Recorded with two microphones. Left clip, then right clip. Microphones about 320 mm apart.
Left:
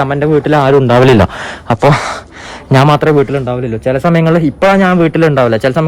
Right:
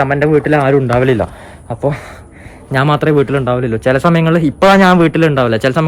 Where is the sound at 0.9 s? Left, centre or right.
Left.